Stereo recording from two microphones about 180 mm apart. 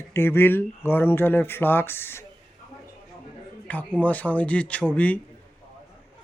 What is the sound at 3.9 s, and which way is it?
Speech, 10° left (ahead or behind).